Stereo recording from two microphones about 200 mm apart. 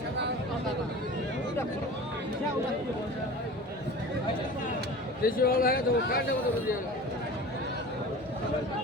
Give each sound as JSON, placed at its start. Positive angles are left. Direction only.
{"t": 5.2, "sound": "speech", "side_deg": 45}